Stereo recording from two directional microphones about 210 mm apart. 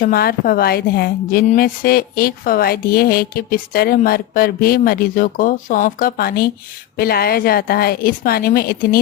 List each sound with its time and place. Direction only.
0.0 s a woman's voice: 45° left (ahead or behind)